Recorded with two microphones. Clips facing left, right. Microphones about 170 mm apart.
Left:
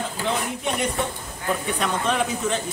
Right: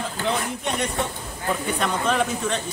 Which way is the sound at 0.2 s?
Centre (ahead or behind).